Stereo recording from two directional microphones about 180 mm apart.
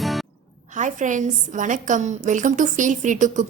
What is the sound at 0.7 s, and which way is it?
A woman's voice, 45° right (ahead or behind).